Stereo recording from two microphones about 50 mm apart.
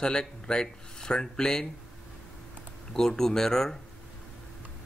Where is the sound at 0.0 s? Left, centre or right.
Centre.